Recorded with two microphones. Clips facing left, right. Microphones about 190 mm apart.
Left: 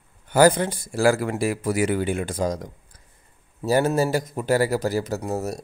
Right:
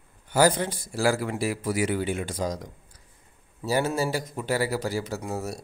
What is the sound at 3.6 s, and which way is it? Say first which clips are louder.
Speech: left 5 dB; 45° left (ahead or behind).